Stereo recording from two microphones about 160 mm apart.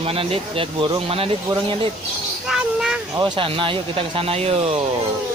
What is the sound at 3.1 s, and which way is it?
Speech, 30° right (ahead or behind).